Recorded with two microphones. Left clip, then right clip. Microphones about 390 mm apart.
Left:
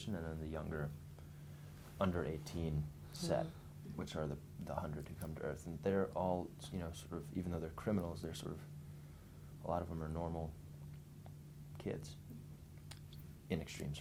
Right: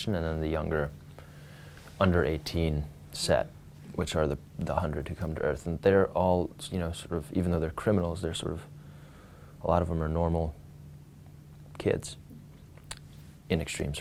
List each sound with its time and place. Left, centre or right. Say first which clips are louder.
0.0 s speech: right 15 dB; right
2.0 s speech: right 13 dB; right
9.6 s speech: right 14 dB; right
11.8 s speech: right 17 dB; right
13.5 s speech: right 13 dB; right